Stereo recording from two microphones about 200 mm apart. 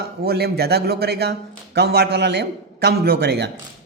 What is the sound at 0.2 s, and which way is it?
A man's voice, 50° right (ahead or behind).